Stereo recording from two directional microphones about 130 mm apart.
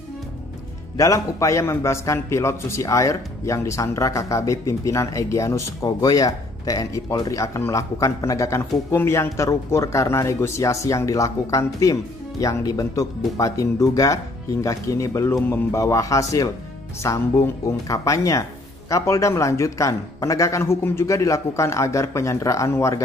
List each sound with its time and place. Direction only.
0.9 s a man's voice: 25° left (ahead or behind)